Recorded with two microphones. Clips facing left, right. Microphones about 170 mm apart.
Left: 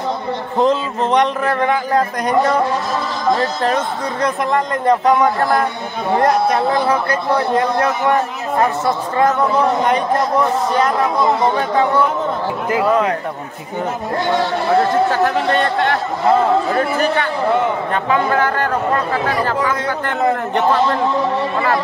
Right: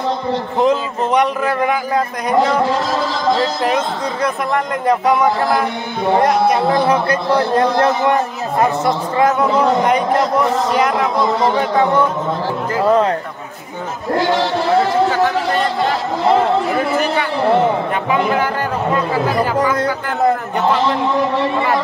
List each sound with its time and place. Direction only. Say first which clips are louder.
0.6 s a man's voice: left 1 dB; 5° right (ahead or behind)
3.6 s speech: right 1 dB; 10° right (ahead or behind)
14.1 s speech: right 3 dB; 90° right
15.0 s a man's voice: even; centre (ahead or behind)
18.3 s speech: left 1 dB; 10° right (ahead or behind)